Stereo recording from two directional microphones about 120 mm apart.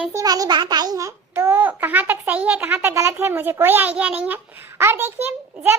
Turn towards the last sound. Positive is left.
turn(degrees=-20)  # may be behind; listen again after turning